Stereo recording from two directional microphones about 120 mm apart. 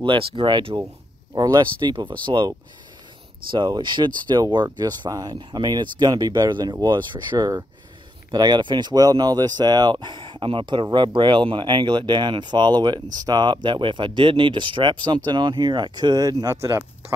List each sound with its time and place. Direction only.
0.0 s speech: 45° right (ahead or behind)
1.3 s speech: 30° right (ahead or behind)
3.5 s speech: 40° right (ahead or behind)